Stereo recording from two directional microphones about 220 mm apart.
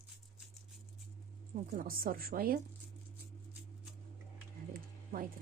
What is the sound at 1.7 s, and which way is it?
Speech, 40° right (ahead or behind).